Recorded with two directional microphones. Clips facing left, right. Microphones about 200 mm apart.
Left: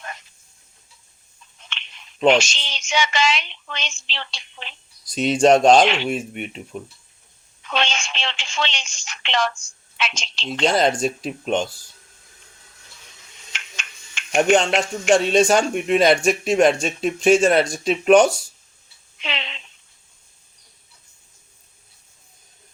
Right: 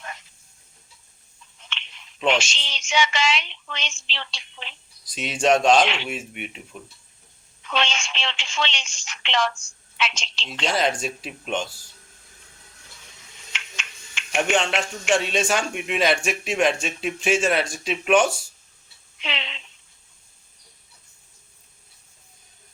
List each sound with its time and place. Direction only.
2.2 s a woman's voice: 40° left (ahead or behind)
7.7 s a woman's voice: 40° left (ahead or behind)
14.3 s a man's voice: 40° left (ahead or behind)